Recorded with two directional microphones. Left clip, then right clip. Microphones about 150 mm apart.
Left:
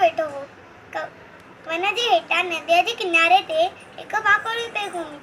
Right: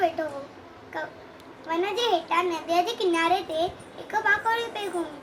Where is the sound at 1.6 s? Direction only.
20° right (ahead or behind).